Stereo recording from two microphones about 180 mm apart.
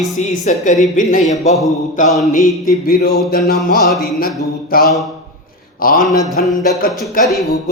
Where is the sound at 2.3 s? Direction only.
55° left (ahead or behind).